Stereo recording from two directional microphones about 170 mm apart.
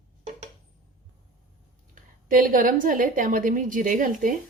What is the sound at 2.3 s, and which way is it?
Speech, 55° right (ahead or behind).